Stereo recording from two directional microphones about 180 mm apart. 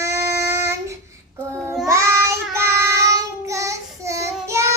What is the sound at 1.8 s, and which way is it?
Child singing, 15° right (ahead or behind).